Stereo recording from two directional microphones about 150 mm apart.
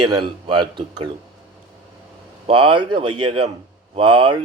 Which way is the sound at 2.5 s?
35° right (ahead or behind).